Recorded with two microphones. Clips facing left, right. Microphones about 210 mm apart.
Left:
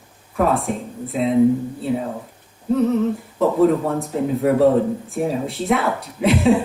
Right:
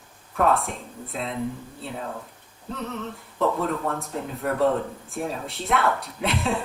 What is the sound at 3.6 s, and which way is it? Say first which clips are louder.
Speech: left 10 dB; centre (ahead or behind).